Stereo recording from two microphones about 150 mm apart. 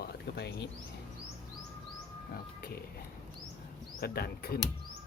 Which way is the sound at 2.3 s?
85° left.